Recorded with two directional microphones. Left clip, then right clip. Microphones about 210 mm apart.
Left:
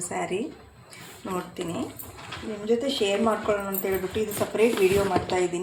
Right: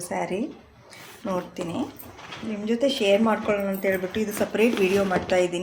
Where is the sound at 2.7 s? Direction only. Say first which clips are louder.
Right 3 dB; 35° right (ahead or behind).